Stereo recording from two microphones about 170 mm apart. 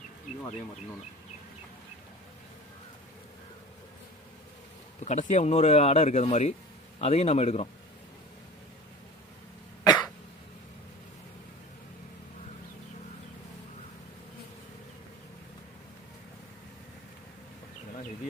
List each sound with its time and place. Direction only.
4.9 s a man's voice: 45° left (ahead or behind)
9.8 s cough: 25° left (ahead or behind)